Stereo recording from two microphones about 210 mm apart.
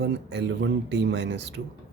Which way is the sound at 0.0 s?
55° right (ahead or behind).